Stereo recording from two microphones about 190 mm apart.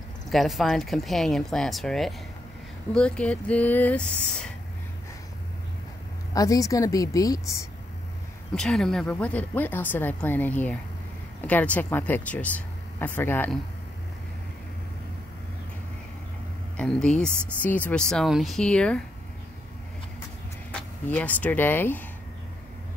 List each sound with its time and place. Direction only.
0.3 s a woman's voice: centre (ahead or behind)
6.3 s a woman's voice: 20° left (ahead or behind)
8.5 s a woman's voice: 5° left (ahead or behind)
16.7 s speech: 5° left (ahead or behind)
20.7 s speech: 10° left (ahead or behind)